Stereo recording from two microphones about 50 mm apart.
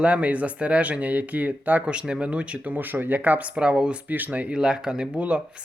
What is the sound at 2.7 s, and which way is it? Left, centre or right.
Speech, right.